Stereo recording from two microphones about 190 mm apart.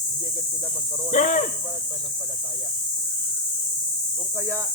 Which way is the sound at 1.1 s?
40° left (ahead or behind).